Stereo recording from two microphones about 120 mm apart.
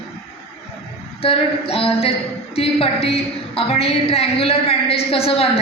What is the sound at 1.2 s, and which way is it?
A woman's voice, 50° left (ahead or behind).